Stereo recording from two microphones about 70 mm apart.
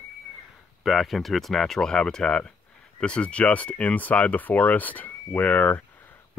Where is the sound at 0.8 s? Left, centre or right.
Centre.